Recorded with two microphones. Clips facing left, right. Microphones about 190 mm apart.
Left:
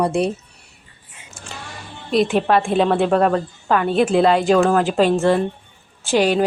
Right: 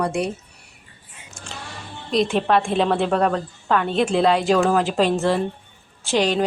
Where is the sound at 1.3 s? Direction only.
5° left (ahead or behind).